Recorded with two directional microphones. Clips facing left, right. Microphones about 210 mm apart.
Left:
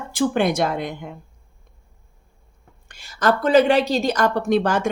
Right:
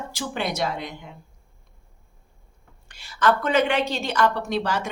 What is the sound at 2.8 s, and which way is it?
A woman's voice, 45° left (ahead or behind).